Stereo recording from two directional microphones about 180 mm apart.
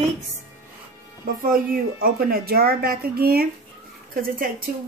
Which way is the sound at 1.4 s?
55° right (ahead or behind).